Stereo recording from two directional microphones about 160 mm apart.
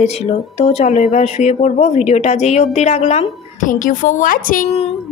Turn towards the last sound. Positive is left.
turn(degrees=60)  # may be behind; listen again after turning